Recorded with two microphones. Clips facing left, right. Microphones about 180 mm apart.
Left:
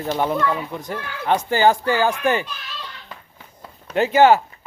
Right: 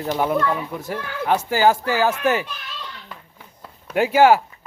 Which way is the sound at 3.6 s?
10° right (ahead or behind).